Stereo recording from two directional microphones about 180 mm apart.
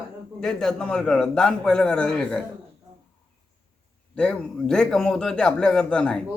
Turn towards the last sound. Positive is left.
turn(degrees=5)  # may be behind; listen again after turning